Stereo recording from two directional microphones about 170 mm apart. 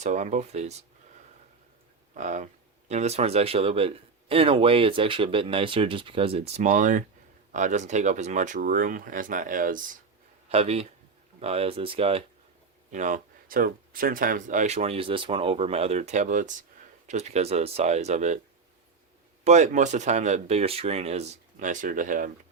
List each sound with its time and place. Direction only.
0.0 s speech: 45° right (ahead or behind)
2.1 s speech: 45° right (ahead or behind)
10.5 s speech: 35° right (ahead or behind)
12.9 s speech: 45° right (ahead or behind)
19.5 s speech: 45° right (ahead or behind)